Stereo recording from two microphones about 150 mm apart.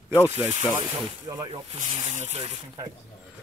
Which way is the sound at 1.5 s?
45° right (ahead or behind).